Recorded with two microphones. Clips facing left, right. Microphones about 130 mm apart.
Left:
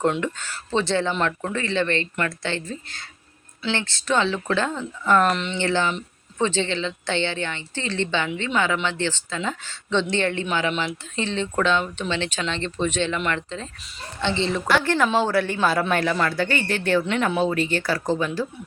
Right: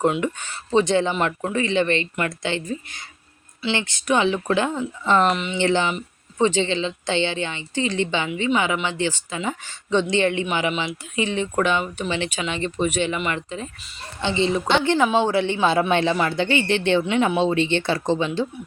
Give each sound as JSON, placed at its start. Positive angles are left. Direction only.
{"t": 0.0, "sound": "speech", "side_deg": -10}
{"t": 5.3, "sound": "speech", "side_deg": -5}
{"t": 5.5, "sound": "speech", "side_deg": -15}